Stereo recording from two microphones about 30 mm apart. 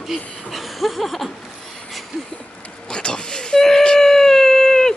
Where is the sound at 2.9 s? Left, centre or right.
Left.